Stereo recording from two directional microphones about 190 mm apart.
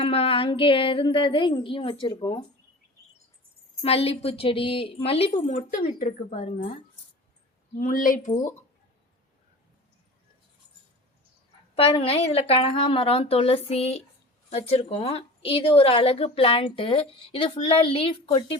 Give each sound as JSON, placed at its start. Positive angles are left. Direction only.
{"t": 0.0, "sound": "a woman's voice", "side_deg": 30}
{"t": 3.8, "sound": "a woman's voice", "side_deg": 30}
{"t": 7.8, "sound": "a woman's voice", "side_deg": 45}
{"t": 11.7, "sound": "a woman's voice", "side_deg": 30}